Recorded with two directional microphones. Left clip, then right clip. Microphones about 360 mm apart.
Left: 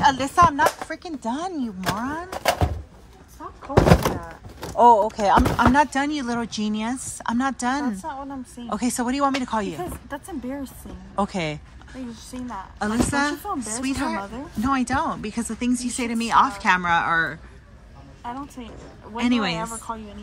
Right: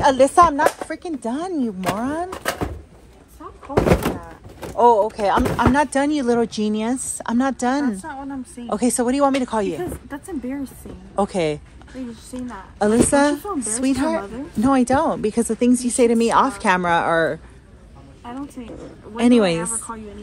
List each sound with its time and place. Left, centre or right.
0.0 s a woman's voice: centre
3.6 s speech: left
4.7 s a woman's voice: centre